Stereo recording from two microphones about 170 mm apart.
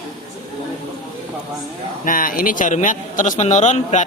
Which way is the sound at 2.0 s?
55° left (ahead or behind).